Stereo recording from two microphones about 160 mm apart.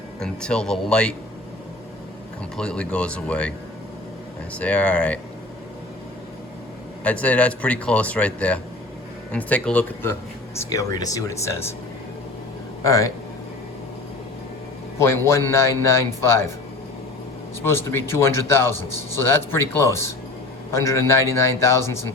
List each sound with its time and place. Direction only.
0.2 s speech: 5° left (ahead or behind)
2.6 s speech: 5° left (ahead or behind)
4.5 s speech: 10° left (ahead or behind)
7.0 s speech: 10° left (ahead or behind)
12.8 s speech: 20° left (ahead or behind)
14.9 s speech: 15° left (ahead or behind)
17.6 s speech: 15° left (ahead or behind)